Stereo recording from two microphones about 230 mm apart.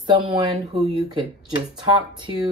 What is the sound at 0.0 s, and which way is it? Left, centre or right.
Speech, right.